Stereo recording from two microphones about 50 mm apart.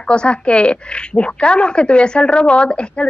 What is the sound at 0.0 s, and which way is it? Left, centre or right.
Speech, centre.